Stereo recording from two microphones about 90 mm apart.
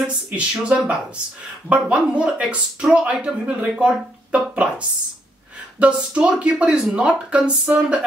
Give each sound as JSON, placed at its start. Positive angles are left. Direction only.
{"t": 0.4, "sound": "speech", "side_deg": -15}